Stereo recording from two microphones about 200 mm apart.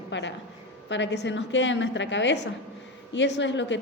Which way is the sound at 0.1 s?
65° left (ahead or behind).